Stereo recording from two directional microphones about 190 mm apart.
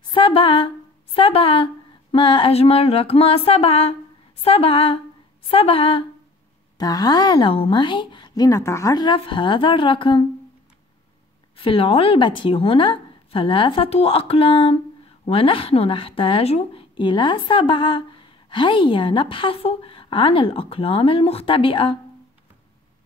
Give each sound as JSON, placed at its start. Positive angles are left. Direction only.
{"t": 0.0, "sound": "a sound", "side_deg": 25}
{"t": 6.8, "sound": "speech", "side_deg": 20}
{"t": 11.5, "sound": "speech", "side_deg": 30}